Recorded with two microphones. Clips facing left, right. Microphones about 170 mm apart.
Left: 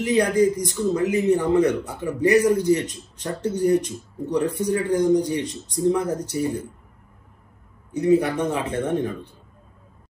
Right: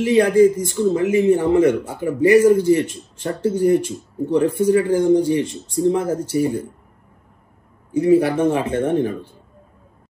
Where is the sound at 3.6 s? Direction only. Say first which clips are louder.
Right 2 dB; centre (ahead or behind).